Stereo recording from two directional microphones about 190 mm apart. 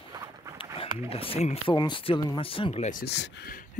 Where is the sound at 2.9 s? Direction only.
55° left (ahead or behind).